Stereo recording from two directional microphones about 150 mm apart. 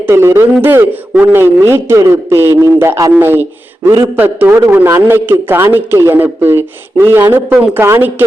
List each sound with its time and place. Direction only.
0.0 s a man's voice: 20° right (ahead or behind)